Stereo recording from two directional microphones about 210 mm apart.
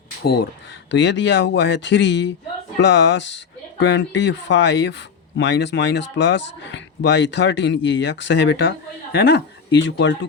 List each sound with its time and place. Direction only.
0.9 s speech: 60° left (ahead or behind)